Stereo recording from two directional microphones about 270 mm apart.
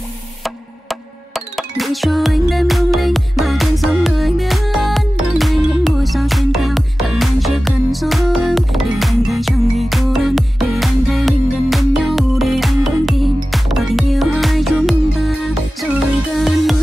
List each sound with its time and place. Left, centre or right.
0.4 s music: centre